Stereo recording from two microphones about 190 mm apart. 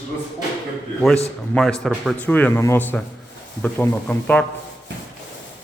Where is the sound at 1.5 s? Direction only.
5° left (ahead or behind).